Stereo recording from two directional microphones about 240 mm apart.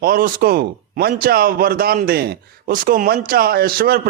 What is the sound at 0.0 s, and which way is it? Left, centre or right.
Speech, right.